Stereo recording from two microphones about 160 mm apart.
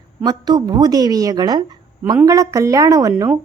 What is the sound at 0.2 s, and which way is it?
A woman's voice, 25° right (ahead or behind).